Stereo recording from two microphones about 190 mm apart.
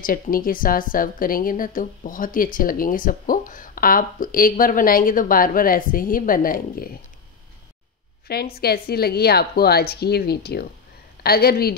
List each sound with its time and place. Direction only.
0.0 s a woman's voice: 50° left (ahead or behind)
8.5 s a woman's voice: 55° left (ahead or behind)